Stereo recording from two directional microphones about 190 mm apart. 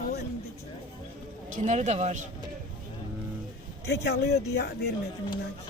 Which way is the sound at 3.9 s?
60° left (ahead or behind).